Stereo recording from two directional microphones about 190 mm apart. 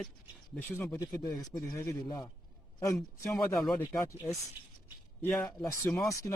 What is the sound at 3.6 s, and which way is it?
Speech, centre (ahead or behind).